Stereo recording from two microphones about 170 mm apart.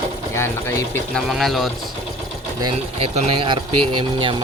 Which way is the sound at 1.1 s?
Centre (ahead or behind).